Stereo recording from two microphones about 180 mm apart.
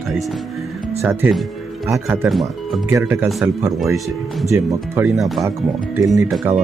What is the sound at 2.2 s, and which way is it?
Speech, centre (ahead or behind).